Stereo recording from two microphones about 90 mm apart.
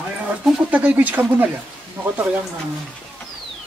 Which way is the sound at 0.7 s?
15° right (ahead or behind).